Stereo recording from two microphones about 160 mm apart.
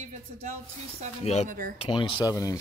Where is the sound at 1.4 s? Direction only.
55° right (ahead or behind).